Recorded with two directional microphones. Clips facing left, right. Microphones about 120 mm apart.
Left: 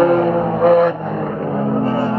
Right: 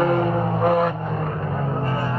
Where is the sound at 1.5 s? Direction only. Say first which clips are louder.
Left 11 dB; 10° left (ahead or behind).